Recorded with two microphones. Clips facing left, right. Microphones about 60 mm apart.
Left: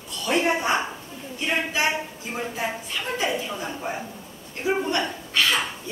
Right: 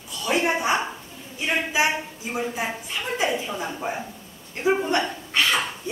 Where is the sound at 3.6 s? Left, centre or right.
Centre.